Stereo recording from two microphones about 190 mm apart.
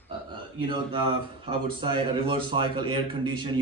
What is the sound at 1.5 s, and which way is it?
A man's voice, 25° right (ahead or behind).